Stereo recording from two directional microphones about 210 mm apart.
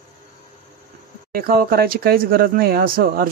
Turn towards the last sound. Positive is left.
turn(degrees=-45)  # may be behind; listen again after turning